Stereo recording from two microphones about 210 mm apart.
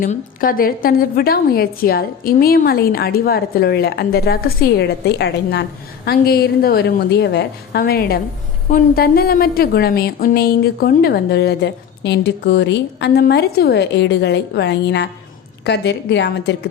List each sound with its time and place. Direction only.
0.0 s a woman's voice: 40° left (ahead or behind)